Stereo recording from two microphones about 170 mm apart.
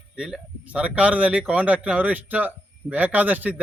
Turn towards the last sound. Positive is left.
turn(degrees=-10)  # may be behind; listen again after turning